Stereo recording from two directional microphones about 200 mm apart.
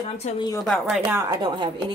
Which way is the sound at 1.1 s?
15° right (ahead or behind).